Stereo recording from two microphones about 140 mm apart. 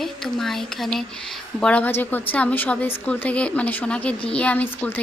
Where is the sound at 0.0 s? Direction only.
Centre (ahead or behind).